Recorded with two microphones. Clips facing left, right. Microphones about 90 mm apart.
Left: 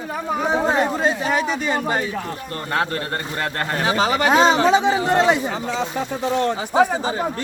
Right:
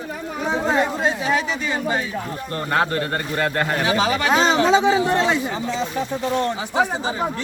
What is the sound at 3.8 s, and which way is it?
Speech, 40° left (ahead or behind).